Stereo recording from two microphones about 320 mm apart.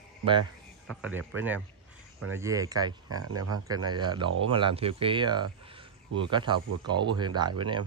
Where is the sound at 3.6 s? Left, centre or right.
Centre.